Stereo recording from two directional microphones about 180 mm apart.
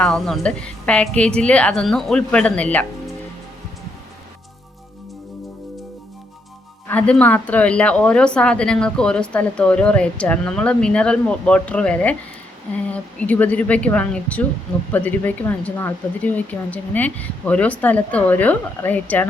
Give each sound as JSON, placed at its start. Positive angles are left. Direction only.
{"t": 0.0, "sound": "speech", "side_deg": 5}
{"t": 6.8, "sound": "speech", "side_deg": 5}